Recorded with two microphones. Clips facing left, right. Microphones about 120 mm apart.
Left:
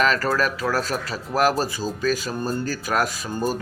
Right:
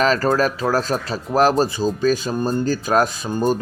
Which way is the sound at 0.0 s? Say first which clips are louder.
Right 4 dB; 30° right (ahead or behind).